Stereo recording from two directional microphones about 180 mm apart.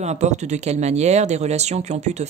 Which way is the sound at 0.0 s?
40° right (ahead or behind).